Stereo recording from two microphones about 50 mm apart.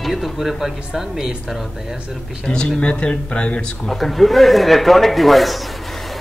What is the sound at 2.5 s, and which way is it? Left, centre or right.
Speech, centre.